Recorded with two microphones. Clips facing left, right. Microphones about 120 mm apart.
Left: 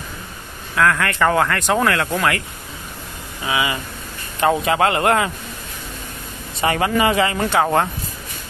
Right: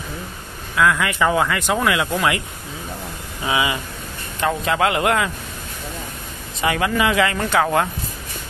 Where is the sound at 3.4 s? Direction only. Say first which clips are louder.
Right 1 dB; 25° right (ahead or behind).